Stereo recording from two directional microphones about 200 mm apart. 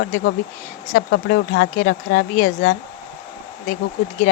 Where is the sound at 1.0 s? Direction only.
60° left (ahead or behind).